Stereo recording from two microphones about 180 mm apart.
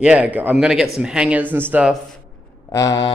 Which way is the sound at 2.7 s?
20° left (ahead or behind).